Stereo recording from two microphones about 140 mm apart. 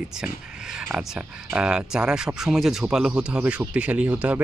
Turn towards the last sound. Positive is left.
turn(degrees=-10)  # may be behind; listen again after turning